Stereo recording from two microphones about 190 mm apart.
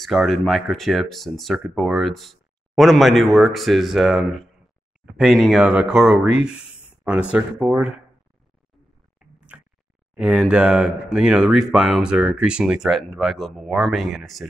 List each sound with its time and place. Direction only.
0.0 s speech: centre (ahead or behind)
9.5 s a sound: 10° right (ahead or behind)
10.1 s speech: 5° right (ahead or behind)